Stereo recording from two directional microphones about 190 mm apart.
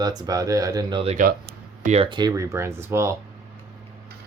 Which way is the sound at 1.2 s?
50° right (ahead or behind).